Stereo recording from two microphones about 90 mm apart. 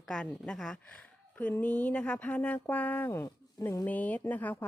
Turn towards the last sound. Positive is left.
turn(degrees=20)  # may be behind; listen again after turning